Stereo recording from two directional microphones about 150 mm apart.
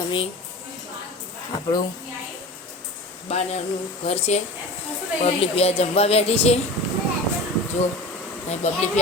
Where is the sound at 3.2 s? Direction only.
45° left (ahead or behind).